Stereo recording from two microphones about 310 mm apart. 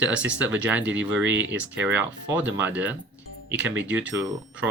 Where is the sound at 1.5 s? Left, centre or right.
Centre.